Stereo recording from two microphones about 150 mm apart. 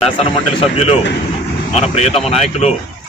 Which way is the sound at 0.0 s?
40° left (ahead or behind).